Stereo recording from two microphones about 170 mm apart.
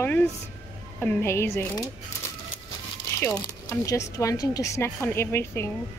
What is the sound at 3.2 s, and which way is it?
Speech, 15° left (ahead or behind).